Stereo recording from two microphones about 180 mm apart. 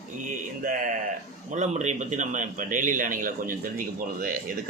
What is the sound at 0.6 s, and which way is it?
A man's voice, 45° right (ahead or behind).